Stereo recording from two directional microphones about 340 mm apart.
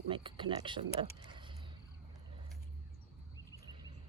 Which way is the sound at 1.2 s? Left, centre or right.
Centre.